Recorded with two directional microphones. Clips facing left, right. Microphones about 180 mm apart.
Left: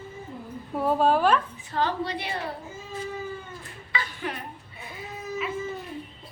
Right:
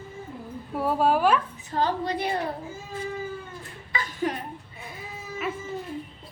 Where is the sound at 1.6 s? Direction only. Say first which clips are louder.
Right 2 dB; 40° right (ahead or behind).